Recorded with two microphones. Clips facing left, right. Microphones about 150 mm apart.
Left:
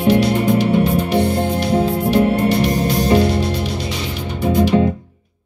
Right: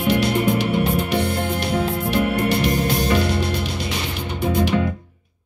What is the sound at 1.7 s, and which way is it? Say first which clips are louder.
Music: left 6 dB; 30° left (ahead or behind).